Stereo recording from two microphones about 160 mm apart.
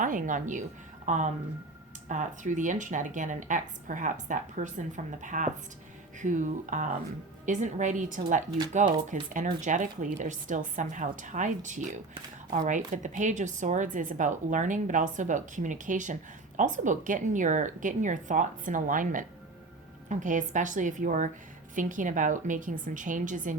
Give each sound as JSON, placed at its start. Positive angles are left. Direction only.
{"t": 0.0, "sound": "a woman's voice", "side_deg": -55}